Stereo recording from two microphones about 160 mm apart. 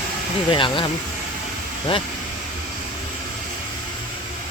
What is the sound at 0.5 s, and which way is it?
Speech, 30° left (ahead or behind).